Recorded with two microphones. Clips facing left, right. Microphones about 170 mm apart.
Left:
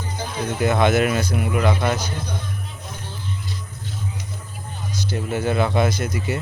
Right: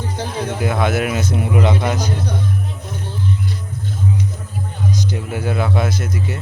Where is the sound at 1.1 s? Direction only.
25° right (ahead or behind).